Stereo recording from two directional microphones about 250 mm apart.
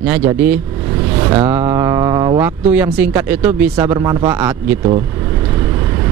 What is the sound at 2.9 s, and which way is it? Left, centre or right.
Speech, centre.